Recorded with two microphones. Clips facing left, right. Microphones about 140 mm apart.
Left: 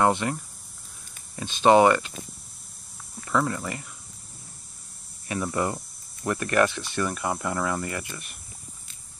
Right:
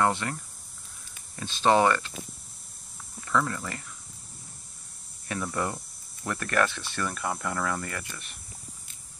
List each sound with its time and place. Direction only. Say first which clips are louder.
0.0 s speech: left 4 dB; 20° left (ahead or behind)
3.3 s speech: left 2 dB; 20° left (ahead or behind)
5.3 s speech: left 4 dB; 15° left (ahead or behind)